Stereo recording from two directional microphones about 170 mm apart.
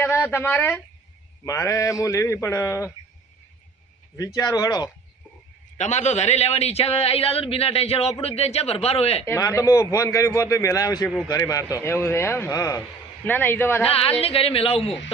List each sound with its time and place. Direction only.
0.0 s a man's voice: 15° left (ahead or behind)
4.4 s a man's voice: 20° left (ahead or behind)
5.7 s a man's voice: 40° left (ahead or behind)
9.2 s a man's voice: 15° left (ahead or behind)
13.8 s a man's voice: 35° left (ahead or behind)